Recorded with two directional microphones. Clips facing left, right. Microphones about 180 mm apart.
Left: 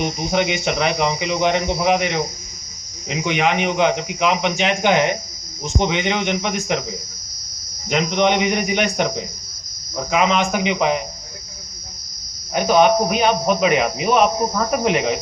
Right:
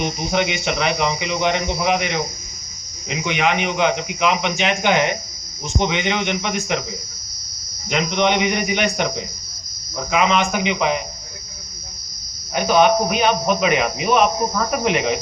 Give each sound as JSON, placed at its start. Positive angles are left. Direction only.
{"t": 0.0, "sound": "a man's voice", "side_deg": 40}
{"t": 7.9, "sound": "a man's voice", "side_deg": 40}
{"t": 12.5, "sound": "speech", "side_deg": 40}